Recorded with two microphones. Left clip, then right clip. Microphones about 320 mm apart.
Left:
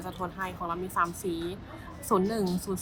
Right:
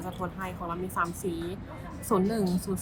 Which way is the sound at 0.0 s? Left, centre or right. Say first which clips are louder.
Left 1 dB; centre.